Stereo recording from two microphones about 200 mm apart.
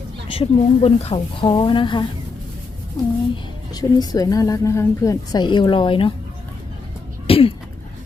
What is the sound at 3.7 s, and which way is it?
A woman's voice, 20° left (ahead or behind).